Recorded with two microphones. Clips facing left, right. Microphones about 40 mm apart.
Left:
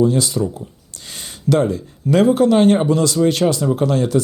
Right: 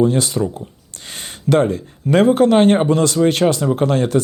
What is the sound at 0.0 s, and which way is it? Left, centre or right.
Speech, right.